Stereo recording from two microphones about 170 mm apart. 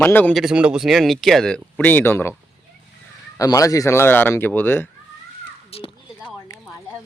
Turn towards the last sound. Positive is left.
turn(degrees=35)  # may be behind; listen again after turning